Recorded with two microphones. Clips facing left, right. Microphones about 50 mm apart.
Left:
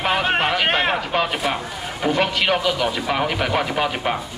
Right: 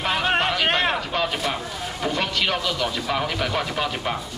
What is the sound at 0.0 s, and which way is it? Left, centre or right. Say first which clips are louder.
Speech: left 2 dB; centre.